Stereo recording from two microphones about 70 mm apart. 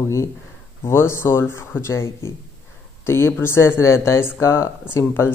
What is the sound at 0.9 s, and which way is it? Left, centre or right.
Speech, left.